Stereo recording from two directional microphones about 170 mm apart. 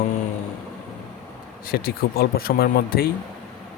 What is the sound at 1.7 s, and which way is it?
Speech, 60° left (ahead or behind).